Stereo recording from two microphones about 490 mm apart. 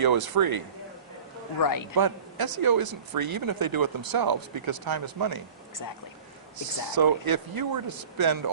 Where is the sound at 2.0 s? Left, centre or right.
Right.